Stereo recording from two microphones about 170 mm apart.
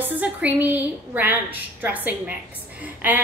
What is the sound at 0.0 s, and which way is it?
A woman's voice, 10° right (ahead or behind).